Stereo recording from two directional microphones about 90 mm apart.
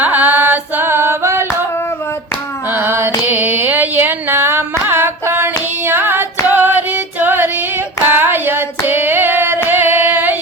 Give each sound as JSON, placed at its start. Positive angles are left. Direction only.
{"t": 0.0, "sound": "carnatic music", "side_deg": -20}
{"t": 2.6, "sound": "a sound", "side_deg": -20}
{"t": 8.0, "sound": "hands", "side_deg": -25}
{"t": 9.6, "sound": "singing", "side_deg": -25}